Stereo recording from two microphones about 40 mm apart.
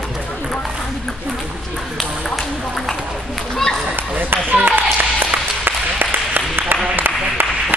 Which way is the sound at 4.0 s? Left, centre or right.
Right.